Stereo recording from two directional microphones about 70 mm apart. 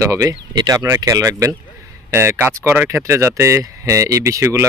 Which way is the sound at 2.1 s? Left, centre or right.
Right.